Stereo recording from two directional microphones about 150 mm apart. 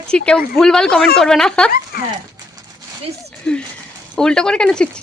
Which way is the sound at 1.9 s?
80° left.